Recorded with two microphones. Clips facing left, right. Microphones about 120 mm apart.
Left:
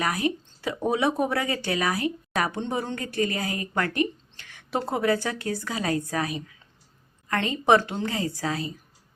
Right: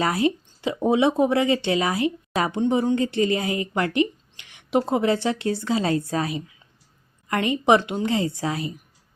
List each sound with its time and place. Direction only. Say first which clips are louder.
0.0 s speech: right 4 dB; 25° right (ahead or behind)